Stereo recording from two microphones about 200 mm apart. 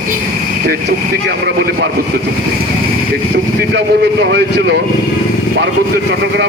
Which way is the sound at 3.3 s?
60° right (ahead or behind).